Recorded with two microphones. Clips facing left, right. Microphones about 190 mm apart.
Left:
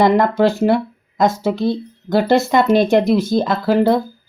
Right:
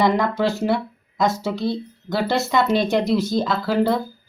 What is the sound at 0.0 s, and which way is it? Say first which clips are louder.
Speech: left 6 dB; 50° left (ahead or behind).